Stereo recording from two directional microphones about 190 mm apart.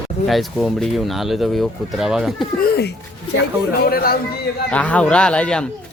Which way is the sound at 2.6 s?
55° left (ahead or behind).